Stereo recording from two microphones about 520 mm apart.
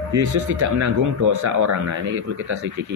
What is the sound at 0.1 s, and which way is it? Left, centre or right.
Speech, right.